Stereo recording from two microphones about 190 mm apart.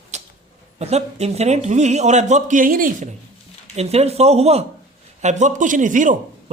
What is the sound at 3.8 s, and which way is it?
Speech, 35° right (ahead or behind).